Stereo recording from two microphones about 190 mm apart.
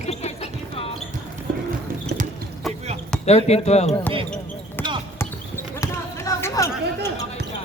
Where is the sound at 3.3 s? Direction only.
35° left (ahead or behind).